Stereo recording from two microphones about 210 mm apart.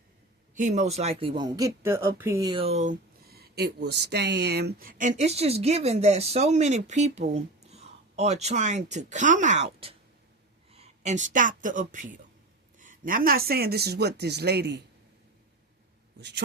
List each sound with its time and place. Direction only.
0.5 s speech: 35° right (ahead or behind); by 14.8 s 50° right (ahead or behind)